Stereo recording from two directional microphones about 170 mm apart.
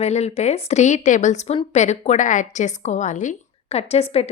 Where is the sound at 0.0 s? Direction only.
40° left (ahead or behind).